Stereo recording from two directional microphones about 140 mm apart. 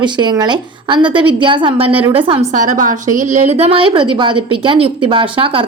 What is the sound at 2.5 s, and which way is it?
A woman's voice, 65° right (ahead or behind).